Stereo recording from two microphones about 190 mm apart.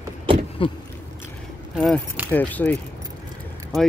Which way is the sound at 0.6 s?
30° left (ahead or behind).